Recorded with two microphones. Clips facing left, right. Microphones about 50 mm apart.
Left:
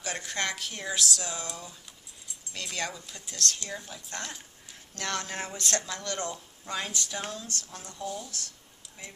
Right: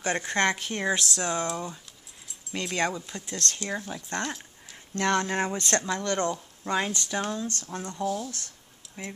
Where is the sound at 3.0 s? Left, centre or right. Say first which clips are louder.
Right 3 dB; right.